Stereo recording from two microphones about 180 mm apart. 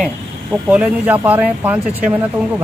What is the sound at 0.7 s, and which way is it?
Speech, 10° right (ahead or behind).